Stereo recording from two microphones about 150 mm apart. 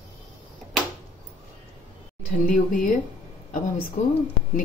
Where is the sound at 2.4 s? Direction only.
65° left (ahead or behind).